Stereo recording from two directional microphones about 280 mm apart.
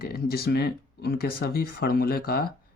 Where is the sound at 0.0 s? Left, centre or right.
Left.